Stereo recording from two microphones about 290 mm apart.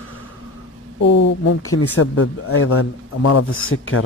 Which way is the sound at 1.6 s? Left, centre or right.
Left.